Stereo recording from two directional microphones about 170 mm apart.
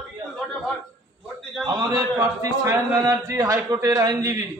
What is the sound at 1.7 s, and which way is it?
A man's voice, 25° right (ahead or behind).